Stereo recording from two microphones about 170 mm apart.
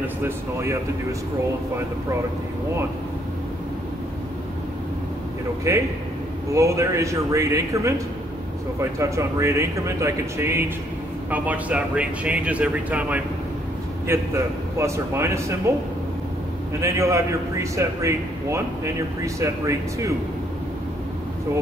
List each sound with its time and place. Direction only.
0.0 s speech: 15° right (ahead or behind)
5.7 s speech: 15° right (ahead or behind)
8.9 s speech: 15° right (ahead or behind)
16.8 s speech: 15° right (ahead or behind)